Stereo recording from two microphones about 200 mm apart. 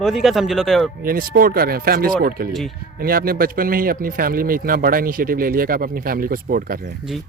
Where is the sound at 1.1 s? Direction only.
45° right (ahead or behind).